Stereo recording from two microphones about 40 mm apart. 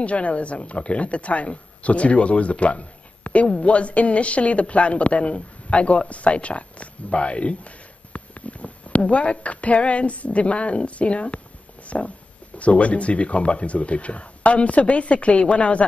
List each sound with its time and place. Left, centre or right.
0.0 s speech: left